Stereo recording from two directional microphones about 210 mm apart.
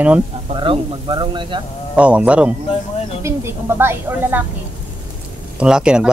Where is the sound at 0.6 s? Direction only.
20° right (ahead or behind).